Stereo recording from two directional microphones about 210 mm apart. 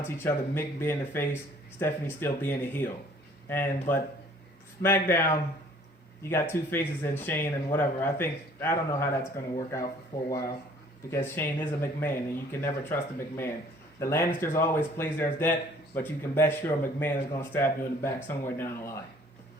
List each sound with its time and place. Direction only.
0.2 s speech: 10° left (ahead or behind)
10.2 s speech: 15° left (ahead or behind)